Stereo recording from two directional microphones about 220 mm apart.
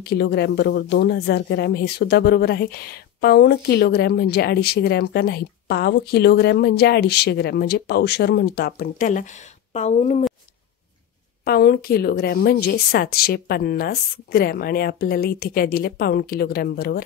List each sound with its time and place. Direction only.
0.0 s speech: 45° left (ahead or behind); by 10.2 s 30° left (ahead or behind)
11.4 s speech: 45° left (ahead or behind)